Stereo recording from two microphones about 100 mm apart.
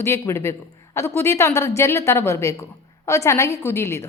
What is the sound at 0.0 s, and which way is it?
A woman's voice, 25° left (ahead or behind).